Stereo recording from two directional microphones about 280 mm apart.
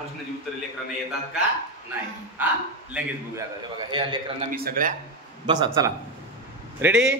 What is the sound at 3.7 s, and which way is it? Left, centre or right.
Speech, centre.